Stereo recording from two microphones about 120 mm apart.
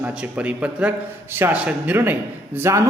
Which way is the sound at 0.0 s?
10° right (ahead or behind).